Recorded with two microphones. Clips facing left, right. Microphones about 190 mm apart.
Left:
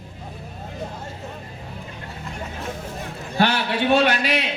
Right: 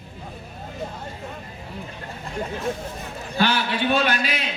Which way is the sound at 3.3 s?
60° left (ahead or behind).